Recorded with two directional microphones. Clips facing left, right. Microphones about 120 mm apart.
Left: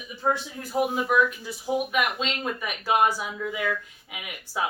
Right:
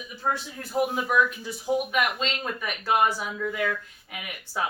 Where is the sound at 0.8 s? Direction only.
Centre (ahead or behind).